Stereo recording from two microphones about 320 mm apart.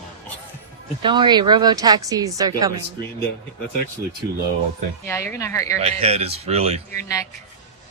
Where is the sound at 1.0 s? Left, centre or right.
Centre.